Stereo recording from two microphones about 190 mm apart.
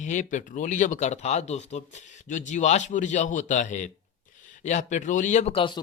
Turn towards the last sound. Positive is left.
turn(degrees=30)  # may be behind; listen again after turning